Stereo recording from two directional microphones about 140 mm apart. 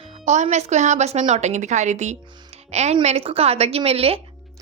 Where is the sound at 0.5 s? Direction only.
55° right (ahead or behind).